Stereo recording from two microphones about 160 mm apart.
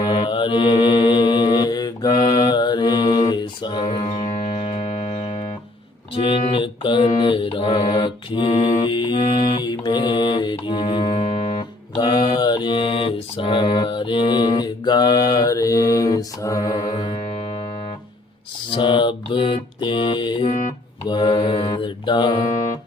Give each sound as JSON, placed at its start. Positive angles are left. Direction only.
{"t": 0.0, "sound": "mantra", "side_deg": 30}
{"t": 3.8, "sound": "music", "side_deg": 40}
{"t": 6.1, "sound": "mantra", "side_deg": 30}
{"t": 11.9, "sound": "mantra", "side_deg": 25}
{"t": 16.9, "sound": "music", "side_deg": 35}
{"t": 18.7, "sound": "mantra", "side_deg": 30}